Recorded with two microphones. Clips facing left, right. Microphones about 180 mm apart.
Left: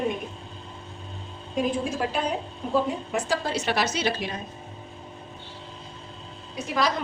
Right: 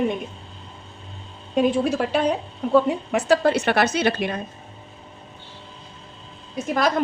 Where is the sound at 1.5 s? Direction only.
70° right (ahead or behind).